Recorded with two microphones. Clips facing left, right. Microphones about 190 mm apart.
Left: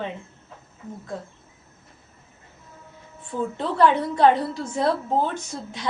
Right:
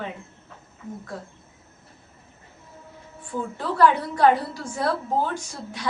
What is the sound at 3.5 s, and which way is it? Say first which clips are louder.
A woman's voice: even; 20° left (ahead or behind).